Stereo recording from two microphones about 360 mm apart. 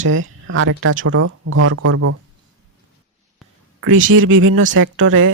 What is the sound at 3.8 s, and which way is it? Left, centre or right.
Speech, right.